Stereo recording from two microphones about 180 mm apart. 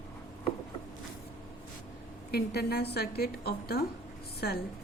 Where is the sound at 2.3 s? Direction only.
65° left (ahead or behind).